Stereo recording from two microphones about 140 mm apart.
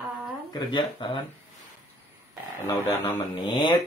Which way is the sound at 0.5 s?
35° left (ahead or behind).